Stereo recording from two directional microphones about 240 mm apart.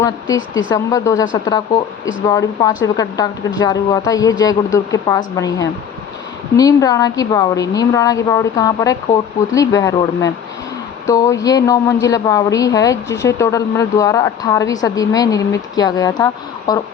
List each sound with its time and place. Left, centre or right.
0.3 s a woman's voice: left
0.7 s a woman's voice: centre
2.2 s a woman's voice: centre